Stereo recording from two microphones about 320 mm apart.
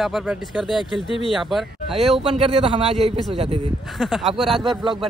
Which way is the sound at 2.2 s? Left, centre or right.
Centre.